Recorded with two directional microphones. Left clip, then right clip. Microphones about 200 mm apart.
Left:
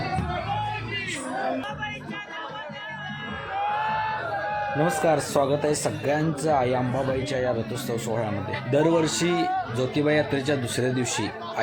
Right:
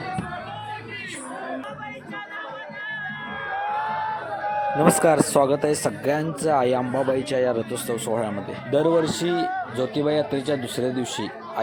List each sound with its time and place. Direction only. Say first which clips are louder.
4.8 s speech: right 5 dB; 55° right (ahead or behind)
8.7 s a man's voice: right 2 dB; 35° right (ahead or behind)